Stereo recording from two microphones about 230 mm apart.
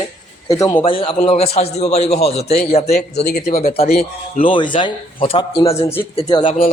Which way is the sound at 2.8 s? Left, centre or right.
Left.